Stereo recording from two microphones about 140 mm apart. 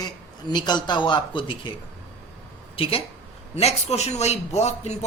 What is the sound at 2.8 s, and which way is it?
A man's voice, 40° left (ahead or behind).